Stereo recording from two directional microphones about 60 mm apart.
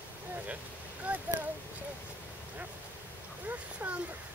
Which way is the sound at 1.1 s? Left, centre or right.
Right.